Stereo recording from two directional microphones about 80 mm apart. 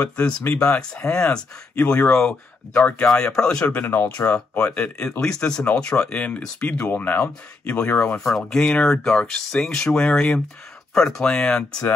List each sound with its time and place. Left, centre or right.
0.0 s speech: centre
3.8 s speech: left
4.2 s speech: centre
6.9 s speech: left
8.2 s speech: centre